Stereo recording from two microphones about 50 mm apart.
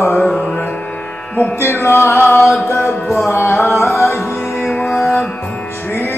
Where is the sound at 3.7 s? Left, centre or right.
Left.